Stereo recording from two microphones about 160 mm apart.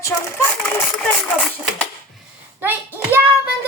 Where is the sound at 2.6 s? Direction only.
15° right (ahead or behind).